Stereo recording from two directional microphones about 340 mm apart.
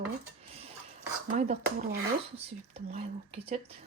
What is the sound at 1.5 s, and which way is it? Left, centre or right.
Speech, centre.